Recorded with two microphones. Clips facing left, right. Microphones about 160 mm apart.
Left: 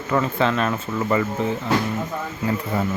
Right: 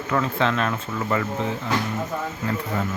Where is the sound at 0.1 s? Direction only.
5° left (ahead or behind).